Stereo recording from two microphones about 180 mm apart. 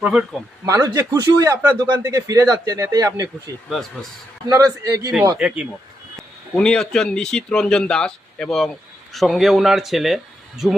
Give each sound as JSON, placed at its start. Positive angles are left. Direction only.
{"t": 0.0, "sound": "speech", "side_deg": -5}
{"t": 0.6, "sound": "a man's voice", "side_deg": -15}
{"t": 5.4, "sound": "speech", "side_deg": -5}